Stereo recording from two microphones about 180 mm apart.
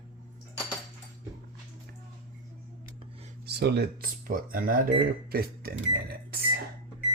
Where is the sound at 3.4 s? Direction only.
65° right (ahead or behind).